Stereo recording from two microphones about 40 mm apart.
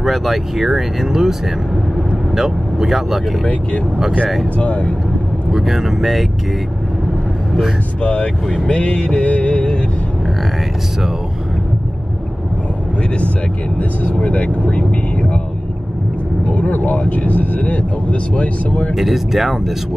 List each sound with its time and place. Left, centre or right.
0.0 s speech: centre
2.3 s speech: centre
4.6 s music: left
5.5 s speech: centre
8.0 s music: left
14.1 s music: left
16.4 s speech: left
17.0 s music: left
18.9 s speech: centre